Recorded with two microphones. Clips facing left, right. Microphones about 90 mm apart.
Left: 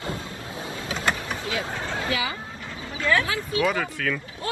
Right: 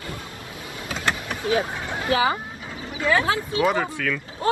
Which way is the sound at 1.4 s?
30° right (ahead or behind).